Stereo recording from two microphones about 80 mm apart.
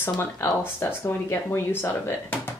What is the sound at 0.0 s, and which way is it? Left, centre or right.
Speech, left.